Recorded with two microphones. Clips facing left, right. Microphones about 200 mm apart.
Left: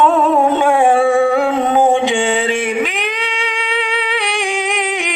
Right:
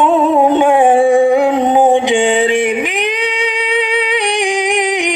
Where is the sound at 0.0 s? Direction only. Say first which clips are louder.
Right 2 dB; 15° right (ahead or behind).